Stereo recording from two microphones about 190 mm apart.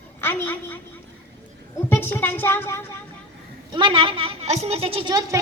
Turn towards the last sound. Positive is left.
turn(degrees=-20)  # may be behind; listen again after turning